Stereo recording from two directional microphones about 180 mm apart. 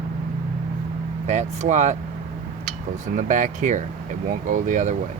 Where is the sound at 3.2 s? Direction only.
45° right (ahead or behind).